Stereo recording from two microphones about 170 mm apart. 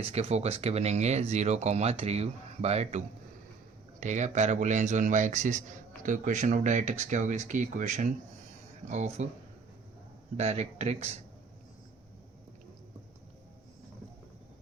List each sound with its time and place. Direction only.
0.0 s speech: 40° right (ahead or behind)
4.0 s a man's voice: 45° right (ahead or behind)
10.3 s speech: 40° right (ahead or behind)